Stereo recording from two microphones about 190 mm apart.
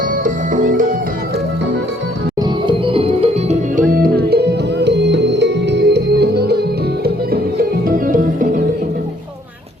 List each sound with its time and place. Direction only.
0.3 s music: 40° right (ahead or behind)
2.6 s music: 30° right (ahead or behind)
3.9 s music: 50° right (ahead or behind)
7.9 s music: 45° right (ahead or behind)